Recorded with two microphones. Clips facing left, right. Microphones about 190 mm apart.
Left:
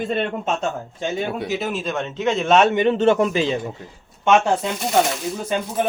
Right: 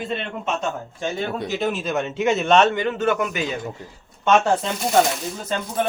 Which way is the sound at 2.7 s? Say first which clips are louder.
Left 5 dB; 20° left (ahead or behind).